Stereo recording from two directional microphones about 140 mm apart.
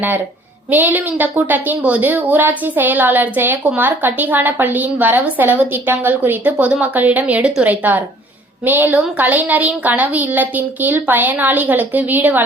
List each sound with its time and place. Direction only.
0.7 s a woman's voice: 15° right (ahead or behind)